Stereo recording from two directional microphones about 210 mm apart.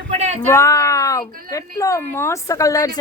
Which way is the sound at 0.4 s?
15° left (ahead or behind).